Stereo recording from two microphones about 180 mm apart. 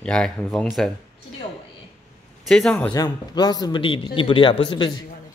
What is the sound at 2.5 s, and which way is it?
Speech, 5° left (ahead or behind).